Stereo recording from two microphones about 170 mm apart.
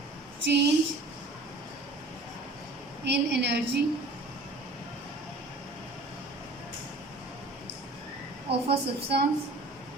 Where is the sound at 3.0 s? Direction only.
80° right.